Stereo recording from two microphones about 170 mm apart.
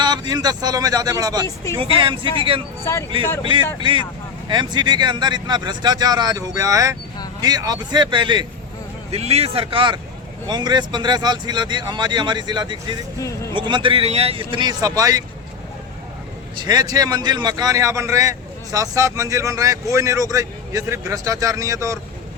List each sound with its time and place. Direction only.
0.0 s a man's voice: 25° right (ahead or behind)
3.8 s speech: 30° right (ahead or behind)
9.1 s a man's voice: 35° right (ahead or behind); by 15.2 s 20° right (ahead or behind)
16.6 s speech: 20° right (ahead or behind)